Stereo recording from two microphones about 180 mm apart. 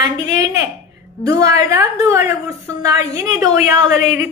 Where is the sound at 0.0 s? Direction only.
20° right (ahead or behind).